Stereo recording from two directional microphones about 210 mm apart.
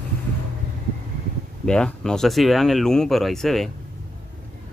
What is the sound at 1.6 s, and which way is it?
Speech, 5° left (ahead or behind).